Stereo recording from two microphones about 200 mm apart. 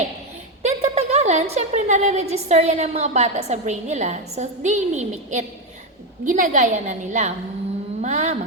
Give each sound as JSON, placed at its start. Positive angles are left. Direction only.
{"t": 0.6, "sound": "a woman's voice", "side_deg": -30}